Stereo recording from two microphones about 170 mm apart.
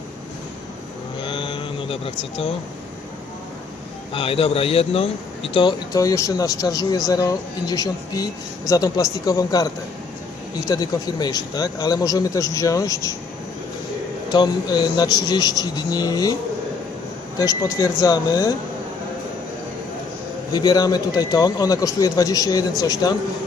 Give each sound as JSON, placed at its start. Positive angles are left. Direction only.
{"t": 1.2, "sound": "a sound", "side_deg": 30}
{"t": 4.1, "sound": "speech", "side_deg": 35}
{"t": 14.3, "sound": "speech", "side_deg": 25}
{"t": 17.3, "sound": "speech", "side_deg": 20}
{"t": 20.5, "sound": "speech", "side_deg": 20}